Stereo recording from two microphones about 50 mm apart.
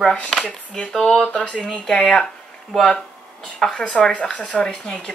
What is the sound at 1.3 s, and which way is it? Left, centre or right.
Speech, left.